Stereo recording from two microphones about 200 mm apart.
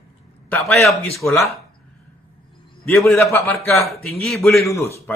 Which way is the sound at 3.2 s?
10° left (ahead or behind).